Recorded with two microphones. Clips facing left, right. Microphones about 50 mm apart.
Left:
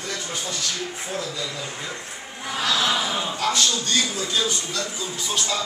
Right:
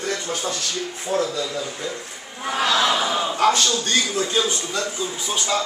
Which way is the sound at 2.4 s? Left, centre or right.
Right.